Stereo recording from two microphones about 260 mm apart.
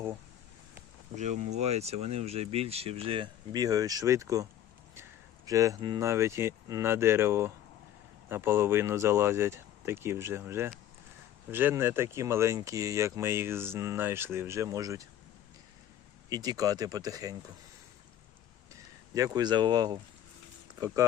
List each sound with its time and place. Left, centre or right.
1.1 s speech: right; by 4.4 s centre
5.5 s speech: centre
16.3 s speech: centre
19.1 s speech: centre